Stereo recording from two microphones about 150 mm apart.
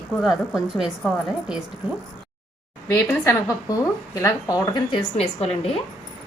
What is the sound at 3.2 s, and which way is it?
A woman's voice, 25° left (ahead or behind).